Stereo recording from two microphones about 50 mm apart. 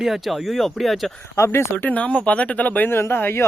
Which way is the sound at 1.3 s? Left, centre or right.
Left.